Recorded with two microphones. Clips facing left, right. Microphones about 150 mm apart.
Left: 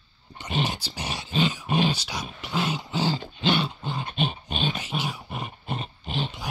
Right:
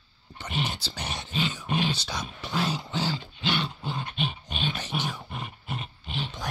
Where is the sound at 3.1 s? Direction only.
20° left (ahead or behind).